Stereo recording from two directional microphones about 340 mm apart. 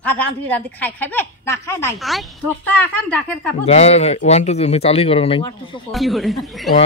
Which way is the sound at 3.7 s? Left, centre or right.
Centre.